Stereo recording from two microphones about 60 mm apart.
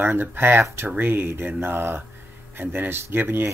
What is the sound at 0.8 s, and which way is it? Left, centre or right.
Speech, right.